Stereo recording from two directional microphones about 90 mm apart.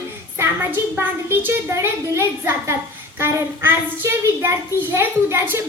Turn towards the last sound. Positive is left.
turn(degrees=-30)  # may be behind; listen again after turning